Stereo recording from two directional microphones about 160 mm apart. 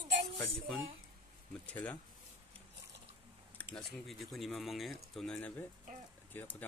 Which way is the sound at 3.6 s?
5° left (ahead or behind).